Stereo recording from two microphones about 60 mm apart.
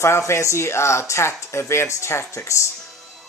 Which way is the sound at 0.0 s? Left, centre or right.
Left.